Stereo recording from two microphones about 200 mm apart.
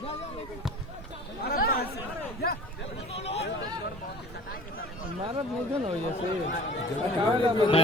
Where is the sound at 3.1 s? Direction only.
30° left (ahead or behind).